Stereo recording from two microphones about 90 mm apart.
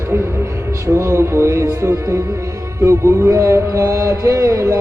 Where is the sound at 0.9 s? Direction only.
30° right (ahead or behind).